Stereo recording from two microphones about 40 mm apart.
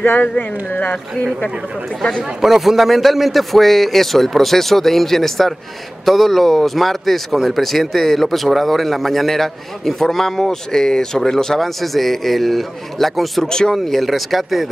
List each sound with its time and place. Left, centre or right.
0.4 s speech: left
2.4 s speech: centre
13.5 s speech: centre
13.9 s speech: centre